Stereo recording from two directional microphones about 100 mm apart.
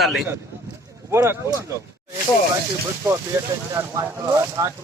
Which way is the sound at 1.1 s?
25° right (ahead or behind).